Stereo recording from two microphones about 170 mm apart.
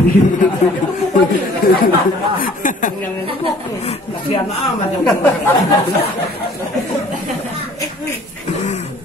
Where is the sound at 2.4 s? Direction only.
50° left (ahead or behind).